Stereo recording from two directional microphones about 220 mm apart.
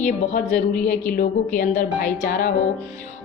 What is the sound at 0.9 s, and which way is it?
A woman's voice, 35° left (ahead or behind).